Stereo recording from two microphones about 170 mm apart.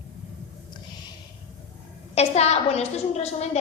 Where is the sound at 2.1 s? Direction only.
40° left (ahead or behind).